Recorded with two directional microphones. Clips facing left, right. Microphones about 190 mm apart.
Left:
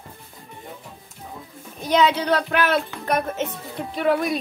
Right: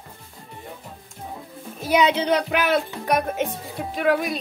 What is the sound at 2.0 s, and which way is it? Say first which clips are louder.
Speech: even; 20° right (ahead or behind).